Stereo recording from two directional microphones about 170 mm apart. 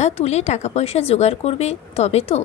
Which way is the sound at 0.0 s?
40° left (ahead or behind).